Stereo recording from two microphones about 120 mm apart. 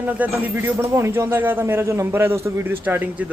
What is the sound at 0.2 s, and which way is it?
A man's voice, 20° right (ahead or behind).